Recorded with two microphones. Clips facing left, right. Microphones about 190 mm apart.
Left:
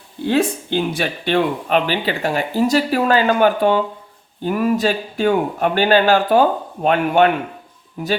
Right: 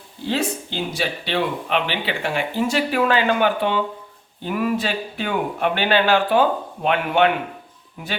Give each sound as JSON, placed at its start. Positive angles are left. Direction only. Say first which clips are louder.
{"t": 0.3, "sound": "speech", "louder": "left 6 dB", "side_deg": 55}